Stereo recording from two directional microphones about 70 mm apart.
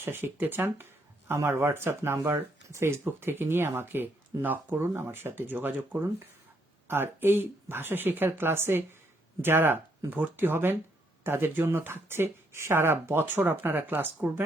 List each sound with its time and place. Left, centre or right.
0.0 s speech: right